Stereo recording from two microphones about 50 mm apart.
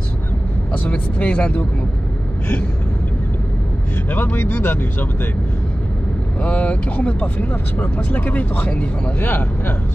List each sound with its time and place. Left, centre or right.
0.8 s speech: left
4.1 s speech: left
6.4 s speech: left
9.3 s speech: left